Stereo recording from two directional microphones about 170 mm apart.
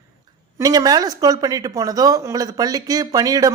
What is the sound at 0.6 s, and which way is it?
Speech, 20° right (ahead or behind).